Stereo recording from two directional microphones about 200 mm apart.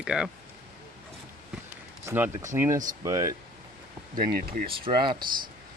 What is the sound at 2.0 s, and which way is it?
Speech, 10° right (ahead or behind).